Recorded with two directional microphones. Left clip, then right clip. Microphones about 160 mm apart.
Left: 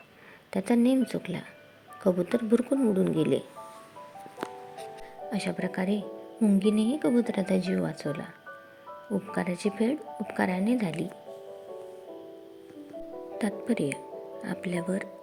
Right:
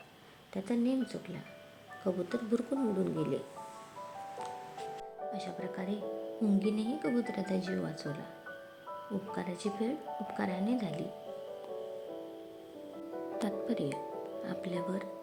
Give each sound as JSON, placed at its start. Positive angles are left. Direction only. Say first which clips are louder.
{"t": 0.5, "sound": "speech", "louder": "left 9 dB", "side_deg": 40}
{"t": 5.3, "sound": "speech", "louder": "left 10 dB", "side_deg": 30}
{"t": 9.3, "sound": "speech", "louder": "left 7 dB", "side_deg": 30}
{"t": 13.4, "sound": "speech", "louder": "left 6 dB", "side_deg": 25}